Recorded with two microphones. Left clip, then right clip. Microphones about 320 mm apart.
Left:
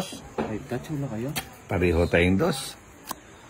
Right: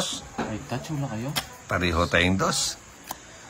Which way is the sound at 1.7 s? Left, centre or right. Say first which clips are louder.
Left 1 dB; centre.